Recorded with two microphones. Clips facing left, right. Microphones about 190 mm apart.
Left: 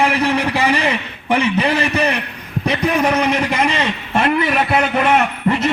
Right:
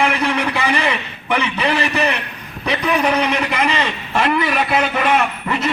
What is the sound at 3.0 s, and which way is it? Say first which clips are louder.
Speech: left 1 dB; 45° left (ahead or behind).